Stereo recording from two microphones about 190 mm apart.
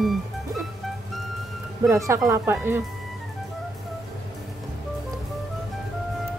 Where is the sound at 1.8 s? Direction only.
15° right (ahead or behind).